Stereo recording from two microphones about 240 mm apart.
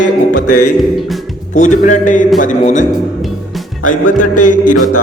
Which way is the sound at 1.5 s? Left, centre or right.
Left.